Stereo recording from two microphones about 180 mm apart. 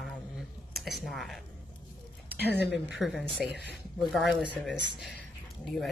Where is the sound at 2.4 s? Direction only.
65° left (ahead or behind).